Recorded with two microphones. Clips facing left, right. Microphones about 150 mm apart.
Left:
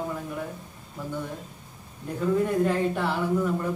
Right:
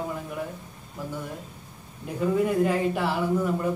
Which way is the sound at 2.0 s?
10° right (ahead or behind).